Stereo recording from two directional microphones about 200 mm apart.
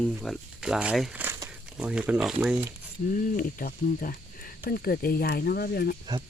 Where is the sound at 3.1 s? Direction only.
40° left (ahead or behind).